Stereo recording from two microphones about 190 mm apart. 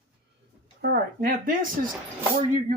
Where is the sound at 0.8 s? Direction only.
55° right (ahead or behind).